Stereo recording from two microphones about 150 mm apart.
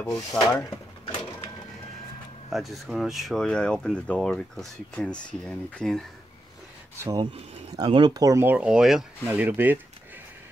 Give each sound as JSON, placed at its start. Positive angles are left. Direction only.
{"t": 0.4, "sound": "speech", "side_deg": 20}
{"t": 2.5, "sound": "speech", "side_deg": 0}
{"t": 7.0, "sound": "speech", "side_deg": -20}
{"t": 8.5, "sound": "speech", "side_deg": -5}